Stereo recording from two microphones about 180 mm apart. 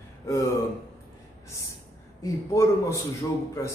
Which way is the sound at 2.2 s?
15° left (ahead or behind).